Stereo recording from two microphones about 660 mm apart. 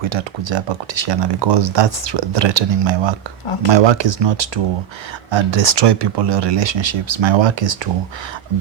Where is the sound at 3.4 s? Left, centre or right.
Left.